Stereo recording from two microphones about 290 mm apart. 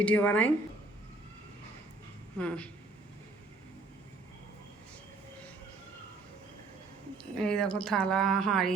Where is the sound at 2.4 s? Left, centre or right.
Centre.